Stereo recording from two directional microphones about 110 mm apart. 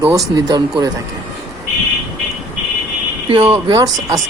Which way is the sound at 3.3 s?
60° right (ahead or behind).